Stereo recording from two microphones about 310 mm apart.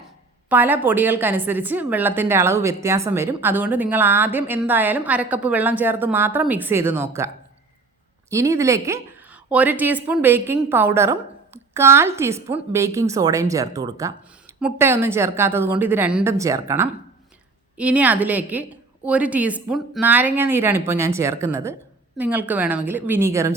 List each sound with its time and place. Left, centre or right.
0.4 s a woman's voice: centre
8.3 s a woman's voice: centre